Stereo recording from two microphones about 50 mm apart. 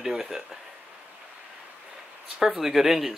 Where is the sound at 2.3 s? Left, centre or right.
Centre.